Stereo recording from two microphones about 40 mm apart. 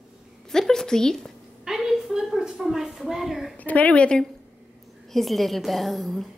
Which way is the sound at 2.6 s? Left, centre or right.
Centre.